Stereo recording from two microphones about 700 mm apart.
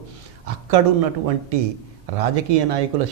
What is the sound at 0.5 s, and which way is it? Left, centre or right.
Speech, right.